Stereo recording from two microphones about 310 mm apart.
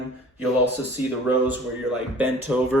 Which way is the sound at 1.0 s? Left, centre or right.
Centre.